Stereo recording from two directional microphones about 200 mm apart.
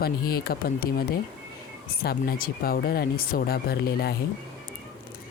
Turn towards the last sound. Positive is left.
turn(degrees=55)  # may be behind; listen again after turning